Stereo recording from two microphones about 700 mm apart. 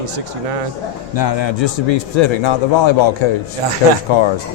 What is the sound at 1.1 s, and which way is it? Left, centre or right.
A man's voice, left.